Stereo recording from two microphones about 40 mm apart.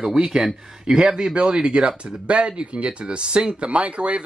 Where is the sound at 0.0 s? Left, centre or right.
Centre.